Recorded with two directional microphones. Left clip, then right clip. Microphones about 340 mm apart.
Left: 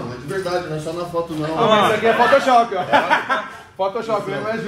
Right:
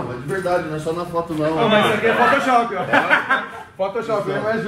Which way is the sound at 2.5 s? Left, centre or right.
Left.